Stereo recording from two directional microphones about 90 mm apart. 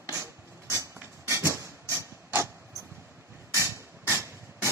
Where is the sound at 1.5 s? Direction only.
30° right (ahead or behind).